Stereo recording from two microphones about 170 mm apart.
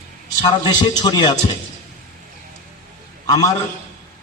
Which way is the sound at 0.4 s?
25° left (ahead or behind).